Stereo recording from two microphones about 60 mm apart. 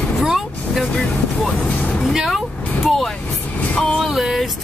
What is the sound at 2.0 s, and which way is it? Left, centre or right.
Speech, centre.